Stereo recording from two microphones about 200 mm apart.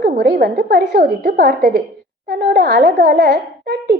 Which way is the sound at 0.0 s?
55° right (ahead or behind).